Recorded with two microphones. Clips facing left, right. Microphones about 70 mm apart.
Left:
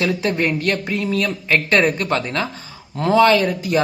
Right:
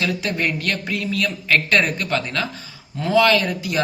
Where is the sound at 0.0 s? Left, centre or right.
Left.